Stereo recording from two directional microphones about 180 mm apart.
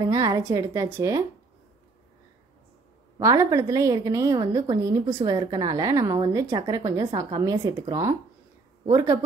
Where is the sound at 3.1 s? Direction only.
20° right (ahead or behind).